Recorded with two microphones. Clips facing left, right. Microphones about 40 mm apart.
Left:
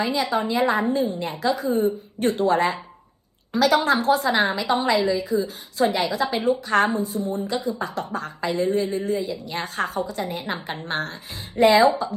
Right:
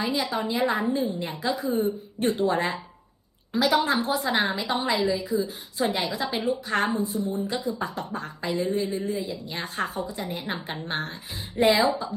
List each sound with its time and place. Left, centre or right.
0.0 s a woman's voice: left
9.9 s a woman's voice: left
10.4 s a woman's voice: left